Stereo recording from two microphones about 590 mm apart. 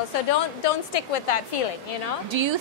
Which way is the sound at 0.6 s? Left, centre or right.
Left.